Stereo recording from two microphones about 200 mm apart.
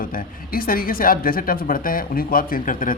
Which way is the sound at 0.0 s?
45° left (ahead or behind).